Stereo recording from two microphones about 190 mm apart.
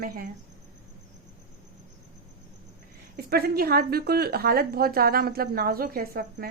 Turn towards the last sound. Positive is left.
turn(degrees=-50)  # may be behind; listen again after turning